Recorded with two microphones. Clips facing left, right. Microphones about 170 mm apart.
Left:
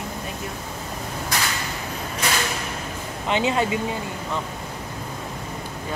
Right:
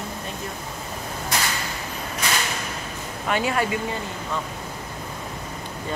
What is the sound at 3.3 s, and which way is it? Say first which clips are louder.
Speech: left 2 dB; 20° left (ahead or behind).